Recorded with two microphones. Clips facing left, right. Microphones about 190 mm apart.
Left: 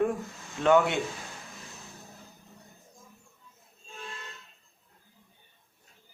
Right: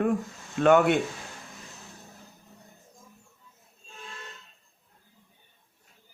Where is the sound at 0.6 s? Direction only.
55° right (ahead or behind).